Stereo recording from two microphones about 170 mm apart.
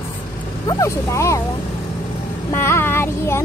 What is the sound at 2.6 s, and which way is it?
Speech, 15° left (ahead or behind).